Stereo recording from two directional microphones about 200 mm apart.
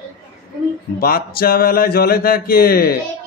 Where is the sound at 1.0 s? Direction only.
45° left (ahead or behind).